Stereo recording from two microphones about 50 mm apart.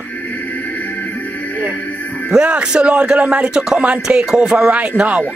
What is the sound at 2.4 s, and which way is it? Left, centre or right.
Speech, right.